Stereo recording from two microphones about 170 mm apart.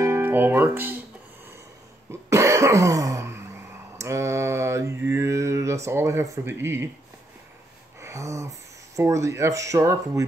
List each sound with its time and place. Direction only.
0.0 s speech: 10° right (ahead or behind)
2.0 s cough: 15° right (ahead or behind)
4.0 s mantra: 15° right (ahead or behind)
5.9 s speech: 15° right (ahead or behind)
8.0 s speech: 15° right (ahead or behind)